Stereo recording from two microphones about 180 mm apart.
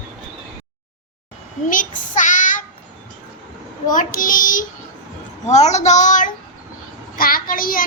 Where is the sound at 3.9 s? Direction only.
45° left (ahead or behind).